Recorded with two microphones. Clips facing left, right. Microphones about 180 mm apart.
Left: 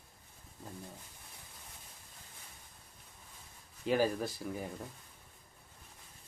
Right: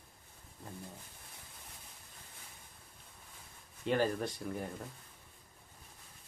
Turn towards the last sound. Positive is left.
turn(degrees=0)  # may be behind; listen again after turning